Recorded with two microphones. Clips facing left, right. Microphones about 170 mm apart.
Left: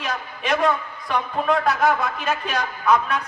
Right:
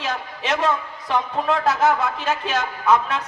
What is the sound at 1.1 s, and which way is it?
Speech, 25° right (ahead or behind).